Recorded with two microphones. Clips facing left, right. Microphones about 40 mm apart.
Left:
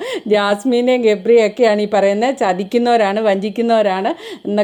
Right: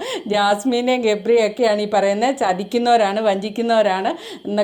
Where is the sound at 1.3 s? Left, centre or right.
Left.